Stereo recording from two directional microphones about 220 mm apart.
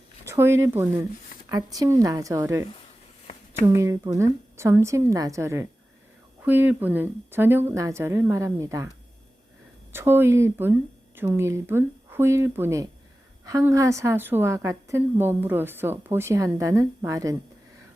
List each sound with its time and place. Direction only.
0.3 s a woman's voice: 10° right (ahead or behind)
9.9 s a woman's voice: 10° right (ahead or behind)